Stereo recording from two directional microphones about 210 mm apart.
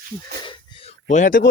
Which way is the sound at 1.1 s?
40° left (ahead or behind).